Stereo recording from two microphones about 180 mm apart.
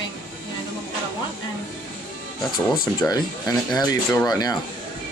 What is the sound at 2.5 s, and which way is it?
Speech, centre (ahead or behind).